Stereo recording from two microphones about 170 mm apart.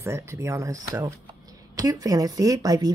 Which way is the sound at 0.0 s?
15° right (ahead or behind).